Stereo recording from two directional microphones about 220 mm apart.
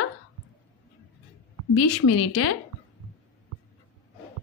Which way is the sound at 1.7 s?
90° left.